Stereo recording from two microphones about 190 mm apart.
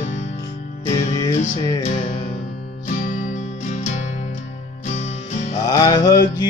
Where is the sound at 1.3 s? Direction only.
35° left (ahead or behind).